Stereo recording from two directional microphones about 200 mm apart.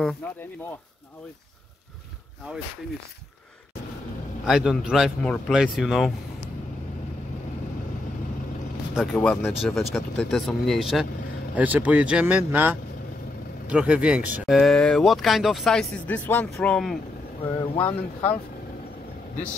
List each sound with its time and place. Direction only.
4.5 s speech: 5° right (ahead or behind)
8.9 s speech: 5° left (ahead or behind)